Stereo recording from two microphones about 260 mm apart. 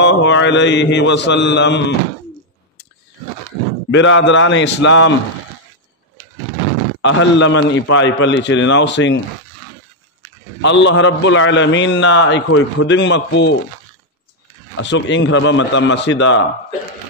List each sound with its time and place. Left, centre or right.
0.0 s a man's voice: left
3.9 s a man's voice: left
7.0 s a man's voice: left
10.6 s a man's voice: left
14.8 s a man's voice: left